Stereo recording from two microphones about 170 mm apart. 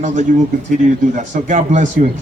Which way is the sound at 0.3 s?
50° right (ahead or behind).